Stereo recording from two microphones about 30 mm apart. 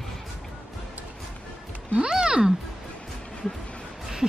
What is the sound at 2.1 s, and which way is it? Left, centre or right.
Speech, right.